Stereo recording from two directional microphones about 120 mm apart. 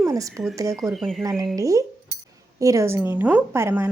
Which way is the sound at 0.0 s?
25° right (ahead or behind).